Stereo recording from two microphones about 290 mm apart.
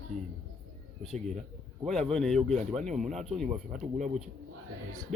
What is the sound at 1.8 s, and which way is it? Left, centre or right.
Speech, centre.